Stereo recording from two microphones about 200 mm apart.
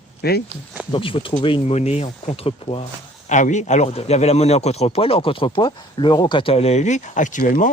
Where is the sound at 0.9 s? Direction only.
25° left (ahead or behind).